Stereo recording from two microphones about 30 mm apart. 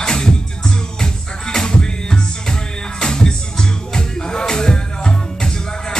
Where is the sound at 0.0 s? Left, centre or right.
Left.